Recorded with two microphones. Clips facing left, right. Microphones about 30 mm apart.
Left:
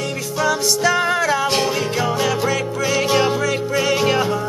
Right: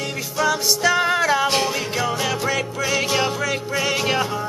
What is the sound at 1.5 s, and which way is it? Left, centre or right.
Music, centre.